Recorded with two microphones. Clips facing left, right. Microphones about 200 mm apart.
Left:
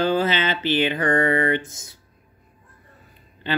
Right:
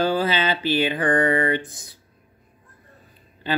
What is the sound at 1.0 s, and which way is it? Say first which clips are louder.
Mantra: right 1 dB; 25° left (ahead or behind).